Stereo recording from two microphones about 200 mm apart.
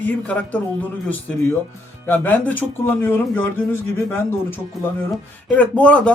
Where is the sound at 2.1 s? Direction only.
10° left (ahead or behind).